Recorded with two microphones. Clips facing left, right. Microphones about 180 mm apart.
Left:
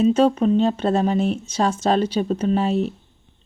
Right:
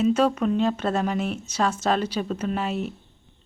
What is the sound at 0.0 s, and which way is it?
Speech, 30° left (ahead or behind).